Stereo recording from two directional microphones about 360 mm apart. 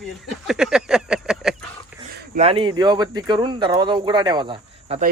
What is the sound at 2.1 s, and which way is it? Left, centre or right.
Speech, right.